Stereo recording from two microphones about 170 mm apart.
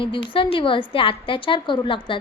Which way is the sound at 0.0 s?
30° left (ahead or behind).